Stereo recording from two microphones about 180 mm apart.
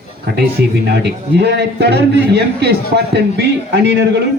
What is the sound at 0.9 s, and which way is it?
A man's voice, 70° right (ahead or behind).